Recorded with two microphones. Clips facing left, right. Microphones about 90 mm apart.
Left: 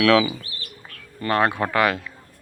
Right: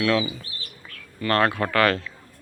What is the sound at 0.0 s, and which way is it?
Speech, 90° left.